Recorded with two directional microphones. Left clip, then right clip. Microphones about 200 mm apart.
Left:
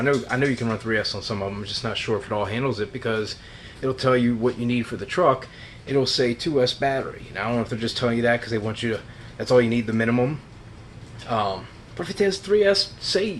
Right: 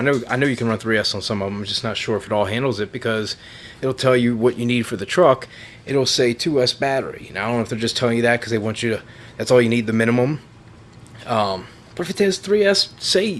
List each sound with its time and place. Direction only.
0.0 s speech: 55° right (ahead or behind)